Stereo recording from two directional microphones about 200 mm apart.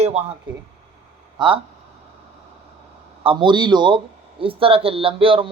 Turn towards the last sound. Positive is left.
turn(degrees=-25)  # may be behind; listen again after turning